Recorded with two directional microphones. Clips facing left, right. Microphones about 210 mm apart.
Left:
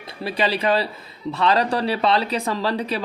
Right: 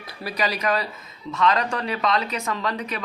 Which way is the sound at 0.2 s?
30° left (ahead or behind).